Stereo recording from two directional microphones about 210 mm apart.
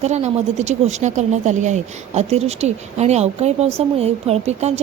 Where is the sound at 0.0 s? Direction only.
30° right (ahead or behind).